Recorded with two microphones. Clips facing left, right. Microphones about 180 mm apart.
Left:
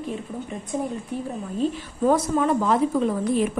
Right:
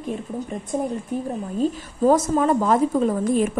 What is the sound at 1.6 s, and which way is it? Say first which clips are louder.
A woman's voice: right 2 dB; 45° right (ahead or behind).